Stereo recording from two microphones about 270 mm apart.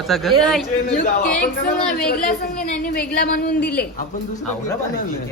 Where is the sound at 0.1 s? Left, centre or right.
Centre.